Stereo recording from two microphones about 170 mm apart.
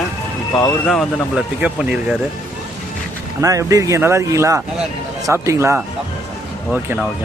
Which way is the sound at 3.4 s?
20° right (ahead or behind).